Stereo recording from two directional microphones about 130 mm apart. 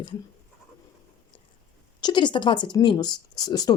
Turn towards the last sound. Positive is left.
turn(degrees=30)  # may be behind; listen again after turning